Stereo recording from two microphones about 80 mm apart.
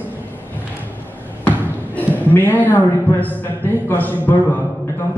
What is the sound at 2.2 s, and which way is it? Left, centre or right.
A woman's voice, left.